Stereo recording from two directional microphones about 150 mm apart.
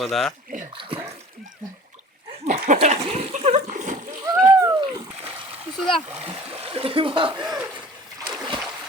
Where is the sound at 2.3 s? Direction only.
45° right (ahead or behind).